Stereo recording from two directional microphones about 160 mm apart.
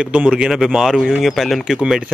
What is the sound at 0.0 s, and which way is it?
Speech, 5° right (ahead or behind).